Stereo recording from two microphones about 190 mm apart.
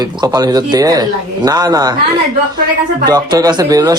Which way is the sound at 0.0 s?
20° right (ahead or behind).